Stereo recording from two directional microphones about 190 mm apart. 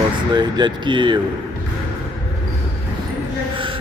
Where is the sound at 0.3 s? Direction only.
25° right (ahead or behind).